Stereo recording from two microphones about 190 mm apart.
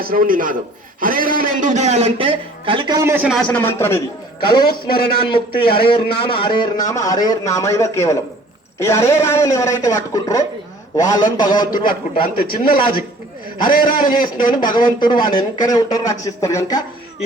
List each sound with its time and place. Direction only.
0.0 s a man's voice: 50° right (ahead or behind); by 3.2 s 15° right (ahead or behind)
3.2 s a man's voice: 5° left (ahead or behind)
4.4 s a man's voice: 25° left (ahead or behind)
12.2 s a man's voice: 50° left (ahead or behind)
14.6 s speech: 25° left (ahead or behind)